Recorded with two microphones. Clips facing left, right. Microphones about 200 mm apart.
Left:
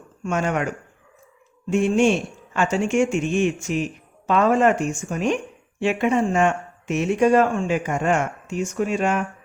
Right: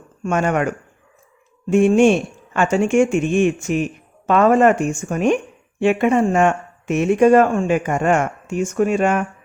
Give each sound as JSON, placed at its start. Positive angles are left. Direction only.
{"t": 0.3, "sound": "speech", "side_deg": -55}
{"t": 1.7, "sound": "speech", "side_deg": -55}